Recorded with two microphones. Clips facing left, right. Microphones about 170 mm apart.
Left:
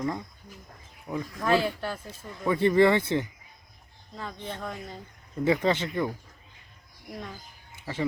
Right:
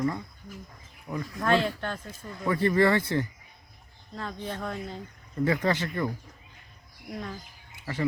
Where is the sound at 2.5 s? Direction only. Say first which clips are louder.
Left 2 dB; 20° left (ahead or behind).